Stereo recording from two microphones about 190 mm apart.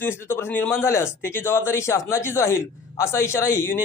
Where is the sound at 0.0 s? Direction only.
10° left (ahead or behind).